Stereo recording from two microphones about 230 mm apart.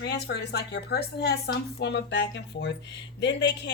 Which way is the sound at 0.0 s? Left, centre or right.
Left.